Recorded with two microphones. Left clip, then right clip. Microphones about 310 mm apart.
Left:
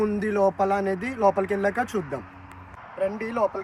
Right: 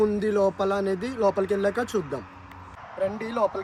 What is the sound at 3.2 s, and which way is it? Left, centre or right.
Speech, centre.